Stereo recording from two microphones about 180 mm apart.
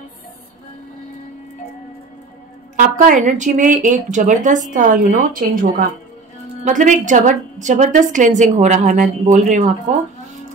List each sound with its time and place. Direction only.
2.7 s speech: 45° right (ahead or behind)